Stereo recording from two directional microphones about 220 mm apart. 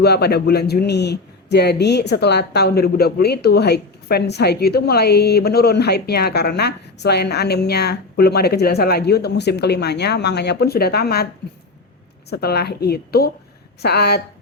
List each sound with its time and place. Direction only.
0.0 s a man's voice: 50° left (ahead or behind)
12.3 s a man's voice: 45° left (ahead or behind)